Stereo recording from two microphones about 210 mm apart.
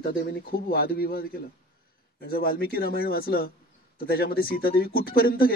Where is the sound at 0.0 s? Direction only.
45° left (ahead or behind).